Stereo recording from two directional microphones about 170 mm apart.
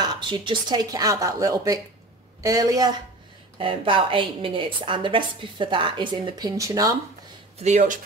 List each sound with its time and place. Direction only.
0.0 s a woman's voice: 25° right (ahead or behind)
7.6 s speech: 50° right (ahead or behind)